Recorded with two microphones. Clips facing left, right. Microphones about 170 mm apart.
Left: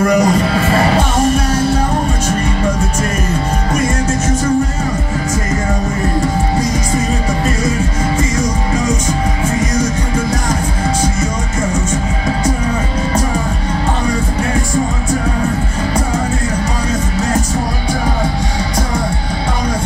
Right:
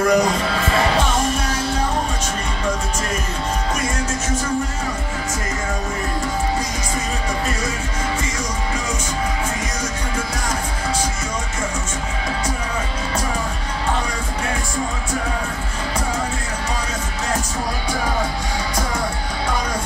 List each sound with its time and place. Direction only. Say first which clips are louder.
0.2 s music: left 6 dB; 40° left (ahead or behind)